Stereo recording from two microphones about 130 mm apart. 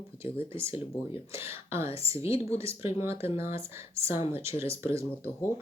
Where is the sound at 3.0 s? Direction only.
20° right (ahead or behind).